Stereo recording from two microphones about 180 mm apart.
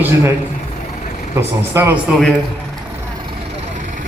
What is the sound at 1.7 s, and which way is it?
Speech, 15° right (ahead or behind).